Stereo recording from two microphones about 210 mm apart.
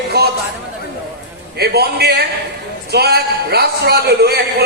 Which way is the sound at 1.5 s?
50° right (ahead or behind).